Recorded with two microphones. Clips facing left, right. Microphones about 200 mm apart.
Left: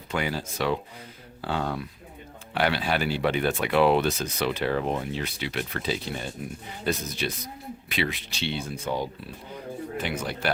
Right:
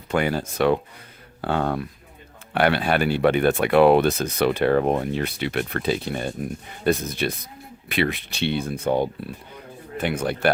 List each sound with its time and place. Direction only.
0.1 s speech: 55° right (ahead or behind)